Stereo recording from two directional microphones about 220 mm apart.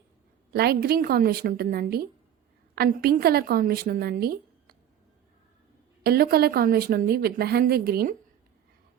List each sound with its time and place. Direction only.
0.5 s speech: 45° right (ahead or behind)
6.0 s speech: 45° right (ahead or behind)